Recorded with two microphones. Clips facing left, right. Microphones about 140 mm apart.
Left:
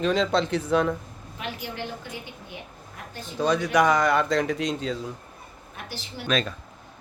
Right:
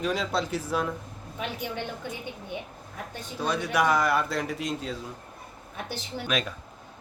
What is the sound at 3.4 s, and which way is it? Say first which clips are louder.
Speech: left 4 dB; 5° right (ahead or behind).